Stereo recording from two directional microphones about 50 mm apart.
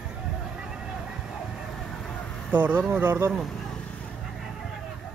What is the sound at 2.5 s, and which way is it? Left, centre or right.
Speech, right.